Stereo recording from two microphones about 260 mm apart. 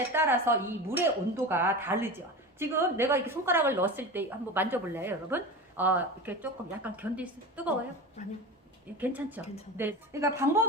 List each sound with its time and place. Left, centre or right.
0.1 s a woman's voice: centre
8.2 s speech: left
9.0 s a woman's voice: centre